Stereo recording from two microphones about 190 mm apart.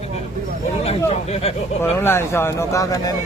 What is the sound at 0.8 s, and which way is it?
Speech, 35° left (ahead or behind).